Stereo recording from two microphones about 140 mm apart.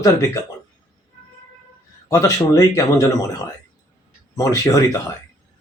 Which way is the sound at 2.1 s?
25° left (ahead or behind).